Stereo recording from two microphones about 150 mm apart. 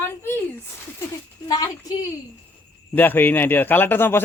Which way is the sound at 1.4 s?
25° left (ahead or behind).